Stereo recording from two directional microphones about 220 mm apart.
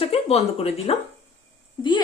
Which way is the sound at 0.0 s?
25° left (ahead or behind).